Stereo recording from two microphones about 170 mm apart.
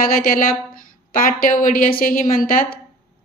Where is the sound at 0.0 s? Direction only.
60° left (ahead or behind).